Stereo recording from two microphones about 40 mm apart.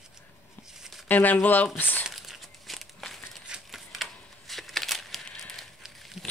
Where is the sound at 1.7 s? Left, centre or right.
Left.